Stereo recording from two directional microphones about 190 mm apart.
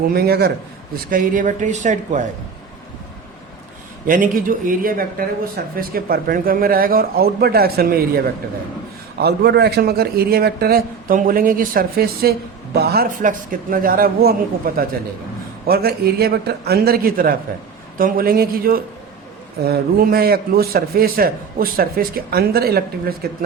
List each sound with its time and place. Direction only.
0.1 s a man's voice: 55° right (ahead or behind)
1.1 s speech: 45° right (ahead or behind)
4.0 s a man's voice: 45° right (ahead or behind)